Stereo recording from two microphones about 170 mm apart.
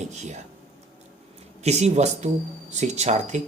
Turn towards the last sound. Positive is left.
turn(degrees=-40)  # may be behind; listen again after turning